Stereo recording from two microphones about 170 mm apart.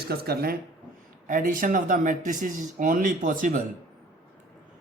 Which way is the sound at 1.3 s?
55° right (ahead or behind).